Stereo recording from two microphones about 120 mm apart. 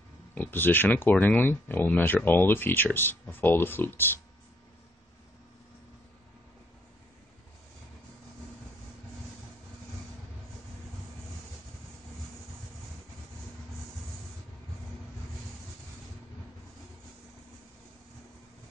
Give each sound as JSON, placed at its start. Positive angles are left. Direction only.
{"t": 0.3, "sound": "speech", "side_deg": 15}